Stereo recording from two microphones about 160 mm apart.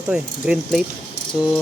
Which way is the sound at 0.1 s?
5° right (ahead or behind).